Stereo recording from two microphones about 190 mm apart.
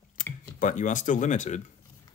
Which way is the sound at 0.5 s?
40° left (ahead or behind).